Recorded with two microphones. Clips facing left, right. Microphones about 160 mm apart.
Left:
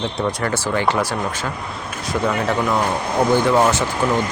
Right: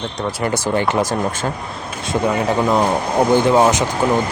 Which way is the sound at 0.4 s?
20° right (ahead or behind).